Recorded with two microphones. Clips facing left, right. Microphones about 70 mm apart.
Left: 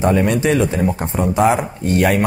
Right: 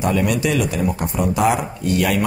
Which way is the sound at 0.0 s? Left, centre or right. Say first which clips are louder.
Left 3 dB; left.